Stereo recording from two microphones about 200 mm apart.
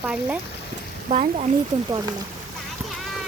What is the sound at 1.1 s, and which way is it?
Speech, 35° right (ahead or behind).